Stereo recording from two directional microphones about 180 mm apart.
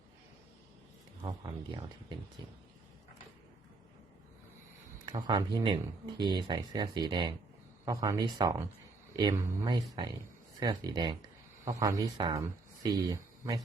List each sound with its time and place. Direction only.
1.2 s speech: 25° right (ahead or behind)
5.1 s speech: 25° right (ahead or behind)